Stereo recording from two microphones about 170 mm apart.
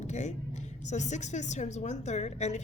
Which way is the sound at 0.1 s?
45° left (ahead or behind).